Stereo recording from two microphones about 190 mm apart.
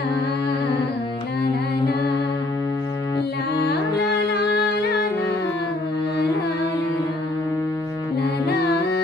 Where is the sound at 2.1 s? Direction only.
20° left (ahead or behind).